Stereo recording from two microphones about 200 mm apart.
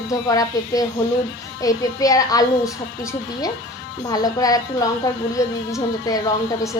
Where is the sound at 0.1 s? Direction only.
15° left (ahead or behind).